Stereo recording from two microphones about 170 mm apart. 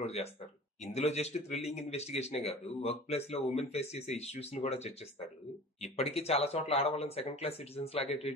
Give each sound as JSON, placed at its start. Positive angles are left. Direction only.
{"t": 0.0, "sound": "a man's voice", "side_deg": 40}